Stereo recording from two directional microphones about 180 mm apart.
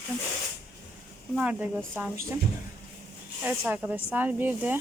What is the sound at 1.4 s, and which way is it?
Speech, 10° right (ahead or behind).